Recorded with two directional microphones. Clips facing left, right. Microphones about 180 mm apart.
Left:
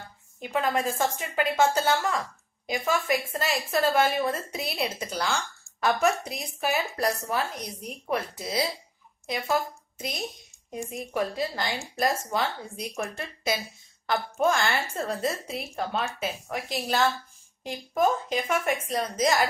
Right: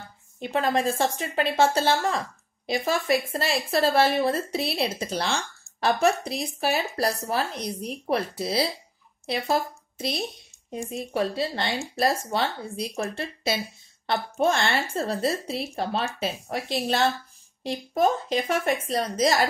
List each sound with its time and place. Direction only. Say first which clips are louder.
0.4 s a woman's voice: right 2 dB; 30° right (ahead or behind)